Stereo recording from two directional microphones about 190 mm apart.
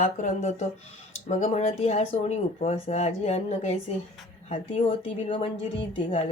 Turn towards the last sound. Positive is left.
turn(degrees=30)  # may be behind; listen again after turning